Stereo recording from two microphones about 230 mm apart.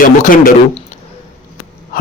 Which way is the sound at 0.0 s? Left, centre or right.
Left.